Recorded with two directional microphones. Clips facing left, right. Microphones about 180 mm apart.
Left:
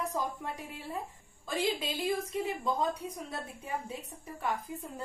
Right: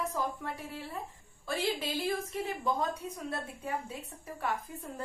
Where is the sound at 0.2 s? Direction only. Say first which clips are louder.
Right 1 dB; 15° left (ahead or behind).